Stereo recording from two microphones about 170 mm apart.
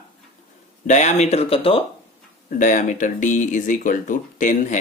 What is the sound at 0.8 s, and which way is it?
Speech, 45° left (ahead or behind).